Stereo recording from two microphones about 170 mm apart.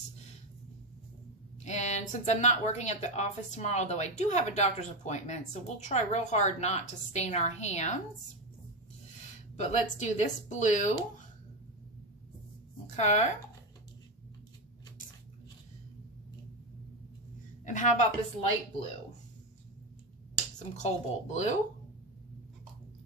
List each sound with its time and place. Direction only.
1.6 s speech: 45° left (ahead or behind)
9.6 s speech: 45° left (ahead or behind)
12.9 s speech: 45° left (ahead or behind)
17.6 s a woman's voice: 45° left (ahead or behind)
20.7 s speech: 40° left (ahead or behind)